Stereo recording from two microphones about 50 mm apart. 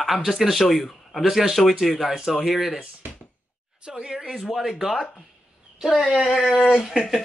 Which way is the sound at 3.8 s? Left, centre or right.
Centre.